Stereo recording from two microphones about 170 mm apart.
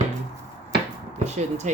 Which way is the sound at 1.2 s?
45° right (ahead or behind).